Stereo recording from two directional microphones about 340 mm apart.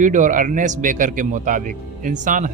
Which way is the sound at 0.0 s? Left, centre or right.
Right.